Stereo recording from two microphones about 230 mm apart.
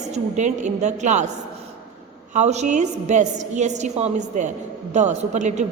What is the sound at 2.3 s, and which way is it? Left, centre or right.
A woman's voice, right.